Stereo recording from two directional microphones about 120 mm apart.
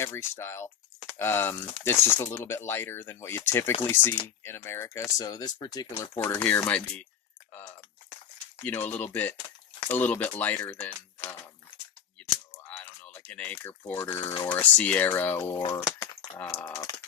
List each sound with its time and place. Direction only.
0.0 s speech: 20° left (ahead or behind)
6.1 s speech: 10° left (ahead or behind)
12.7 s typing: 15° left (ahead or behind)
13.6 s speech: 15° left (ahead or behind)
16.6 s speech: 25° left (ahead or behind)